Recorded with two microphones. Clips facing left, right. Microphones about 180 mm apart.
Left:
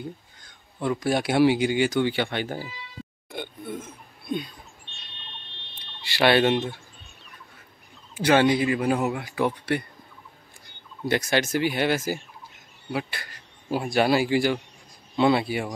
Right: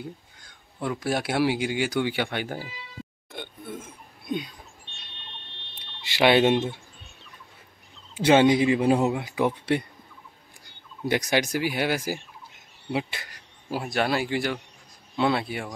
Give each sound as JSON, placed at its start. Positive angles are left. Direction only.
{"t": 0.7, "sound": "speech", "side_deg": -5}
{"t": 3.3, "sound": "a sound", "side_deg": 0}
{"t": 6.1, "sound": "speech", "side_deg": -20}
{"t": 8.2, "sound": "speech", "side_deg": -25}
{"t": 11.1, "sound": "speech", "side_deg": -15}
{"t": 13.7, "sound": "speech", "side_deg": 0}